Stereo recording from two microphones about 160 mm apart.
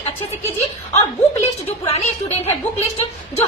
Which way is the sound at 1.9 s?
40° left (ahead or behind).